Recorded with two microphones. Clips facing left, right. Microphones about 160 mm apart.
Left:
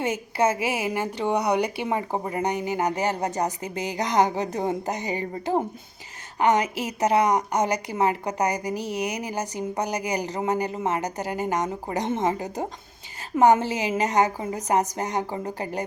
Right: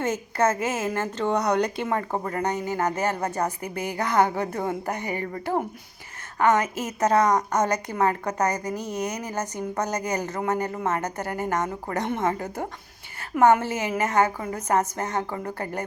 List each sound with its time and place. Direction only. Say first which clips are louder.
0.0 s speech: even; 10° left (ahead or behind)